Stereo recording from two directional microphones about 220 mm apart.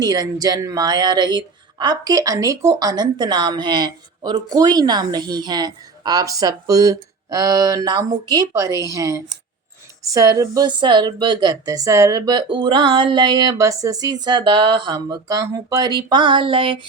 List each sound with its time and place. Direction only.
0.0 s speech: 15° right (ahead or behind)